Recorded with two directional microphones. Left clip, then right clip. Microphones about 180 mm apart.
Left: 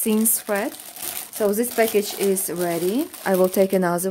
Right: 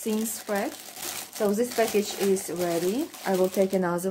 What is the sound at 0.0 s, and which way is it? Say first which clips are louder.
Speech: left 7 dB; 60° left (ahead or behind).